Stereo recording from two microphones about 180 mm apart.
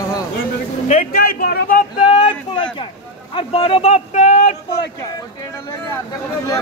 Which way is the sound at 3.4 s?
30° left (ahead or behind).